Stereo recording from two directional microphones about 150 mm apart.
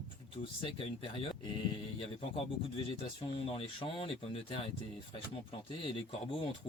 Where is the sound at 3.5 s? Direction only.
35° left (ahead or behind).